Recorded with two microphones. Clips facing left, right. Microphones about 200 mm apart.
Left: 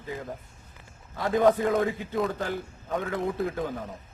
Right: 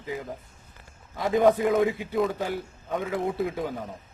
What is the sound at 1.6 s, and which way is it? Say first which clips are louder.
A man's voice: right 2 dB; centre (ahead or behind).